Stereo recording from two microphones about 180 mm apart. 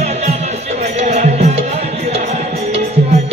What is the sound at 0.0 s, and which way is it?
Music, 35° right (ahead or behind).